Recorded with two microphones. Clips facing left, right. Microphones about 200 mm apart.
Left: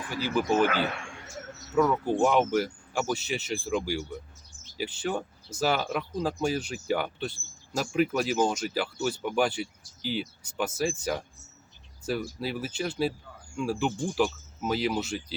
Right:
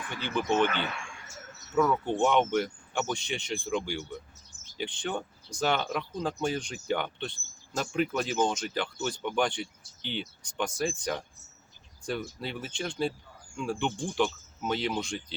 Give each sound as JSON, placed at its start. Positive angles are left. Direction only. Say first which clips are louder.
{"t": 0.1, "sound": "speech", "louder": "left 4 dB", "side_deg": 5}
{"t": 0.7, "sound": "speech", "louder": "left 5 dB", "side_deg": 35}
{"t": 1.7, "sound": "speech", "louder": "left 2 dB", "side_deg": 5}